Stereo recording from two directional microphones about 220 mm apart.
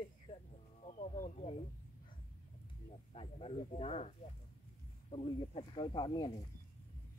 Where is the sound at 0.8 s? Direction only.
35° left (ahead or behind).